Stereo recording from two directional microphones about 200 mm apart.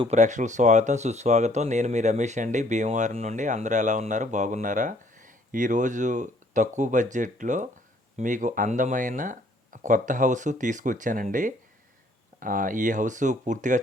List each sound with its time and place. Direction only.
0.0 s speech: 35° right (ahead or behind)